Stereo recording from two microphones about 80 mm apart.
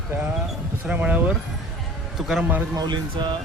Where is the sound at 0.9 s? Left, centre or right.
Centre.